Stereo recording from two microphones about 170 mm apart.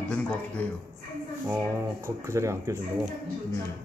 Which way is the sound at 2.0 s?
15° right (ahead or behind).